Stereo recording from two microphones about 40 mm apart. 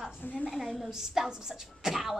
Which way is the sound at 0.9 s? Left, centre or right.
Centre.